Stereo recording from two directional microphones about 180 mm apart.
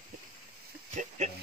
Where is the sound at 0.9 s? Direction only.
40° right (ahead or behind).